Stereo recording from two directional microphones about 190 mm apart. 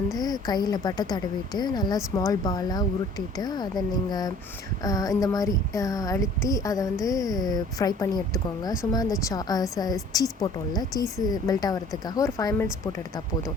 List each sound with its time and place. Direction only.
0.2 s speech: 20° left (ahead or behind)